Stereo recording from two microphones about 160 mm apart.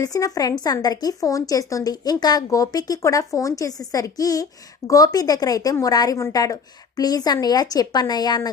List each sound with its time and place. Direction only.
0.0 s a woman's voice: 20° left (ahead or behind)